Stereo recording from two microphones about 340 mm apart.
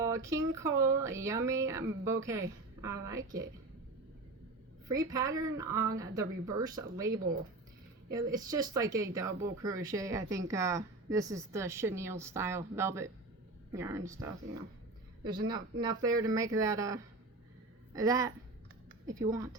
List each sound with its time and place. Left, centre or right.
0.0 s a woman's voice: centre
4.9 s speech: centre
15.8 s speech: centre